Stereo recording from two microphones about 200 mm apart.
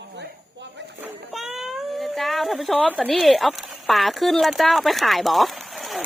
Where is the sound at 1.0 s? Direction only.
Centre (ahead or behind).